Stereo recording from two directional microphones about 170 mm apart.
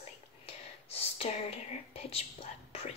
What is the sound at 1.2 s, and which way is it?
Speech, 35° left (ahead or behind).